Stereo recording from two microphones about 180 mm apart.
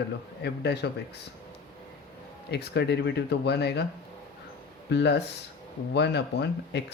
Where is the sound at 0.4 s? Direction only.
70° left (ahead or behind).